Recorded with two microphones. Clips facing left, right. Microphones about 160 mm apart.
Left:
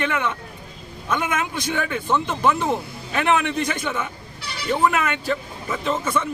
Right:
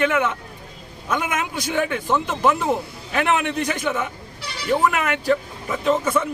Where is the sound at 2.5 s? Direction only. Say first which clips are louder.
Even; 15° right (ahead or behind).